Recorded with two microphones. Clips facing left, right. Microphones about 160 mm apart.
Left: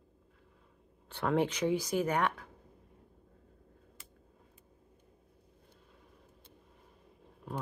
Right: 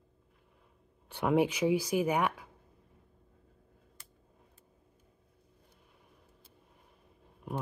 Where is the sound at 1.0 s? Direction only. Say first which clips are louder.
Right 3 dB; 10° right (ahead or behind).